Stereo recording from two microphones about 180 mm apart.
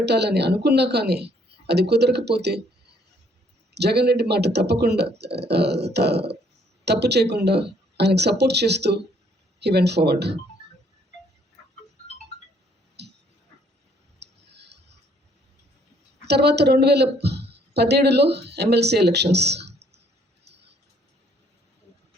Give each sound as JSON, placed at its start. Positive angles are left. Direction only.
{"t": 0.0, "sound": "speech", "side_deg": -70}
{"t": 3.8, "sound": "speech", "side_deg": -65}
{"t": 13.0, "sound": "a sound", "side_deg": -70}
{"t": 14.2, "sound": "clicking", "side_deg": -70}
{"t": 16.2, "sound": "a woman's voice", "side_deg": -65}
{"t": 20.4, "sound": "a sound", "side_deg": -70}